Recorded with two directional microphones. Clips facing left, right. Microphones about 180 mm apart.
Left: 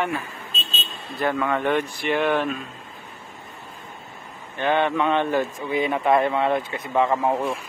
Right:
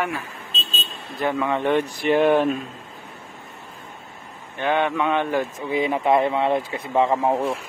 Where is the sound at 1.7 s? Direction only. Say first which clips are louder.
Right 3 dB; 40° right (ahead or behind).